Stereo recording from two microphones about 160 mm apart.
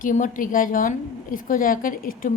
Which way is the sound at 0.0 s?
55° left (ahead or behind).